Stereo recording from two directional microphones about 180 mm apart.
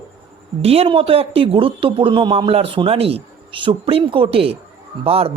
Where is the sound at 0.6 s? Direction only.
35° right (ahead or behind).